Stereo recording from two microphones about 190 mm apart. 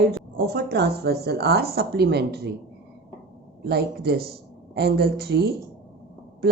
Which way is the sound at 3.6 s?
55° right (ahead or behind).